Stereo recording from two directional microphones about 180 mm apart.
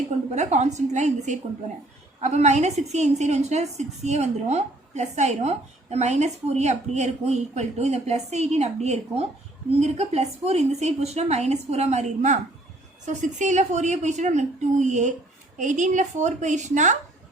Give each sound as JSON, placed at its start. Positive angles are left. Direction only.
{"t": 0.3, "sound": "a woman's voice", "side_deg": -40}